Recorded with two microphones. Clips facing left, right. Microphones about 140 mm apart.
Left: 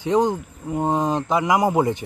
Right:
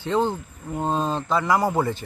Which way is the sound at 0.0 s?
15° left (ahead or behind).